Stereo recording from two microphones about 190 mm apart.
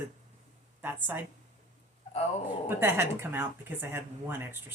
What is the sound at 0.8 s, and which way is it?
Speech, 10° right (ahead or behind).